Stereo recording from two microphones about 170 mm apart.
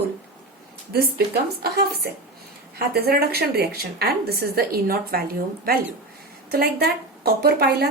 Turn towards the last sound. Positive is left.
turn(degrees=-70)  # may be behind; listen again after turning